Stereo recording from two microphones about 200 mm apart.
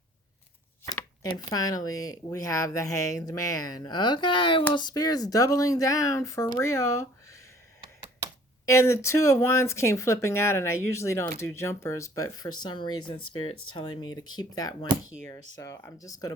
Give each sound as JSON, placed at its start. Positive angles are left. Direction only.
{"t": 0.9, "sound": "speech", "side_deg": 15}
{"t": 8.6, "sound": "speech", "side_deg": 15}
{"t": 13.5, "sound": "speech", "side_deg": 90}
{"t": 14.0, "sound": "speech", "side_deg": 20}